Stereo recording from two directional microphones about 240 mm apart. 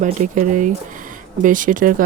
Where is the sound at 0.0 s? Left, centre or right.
Right.